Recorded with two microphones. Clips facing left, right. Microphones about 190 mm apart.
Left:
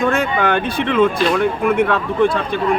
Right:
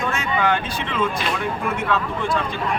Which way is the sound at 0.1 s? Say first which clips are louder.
Left 5 dB; 55° left (ahead or behind).